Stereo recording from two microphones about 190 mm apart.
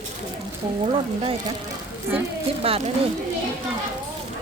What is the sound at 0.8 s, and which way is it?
Speech, 30° right (ahead or behind).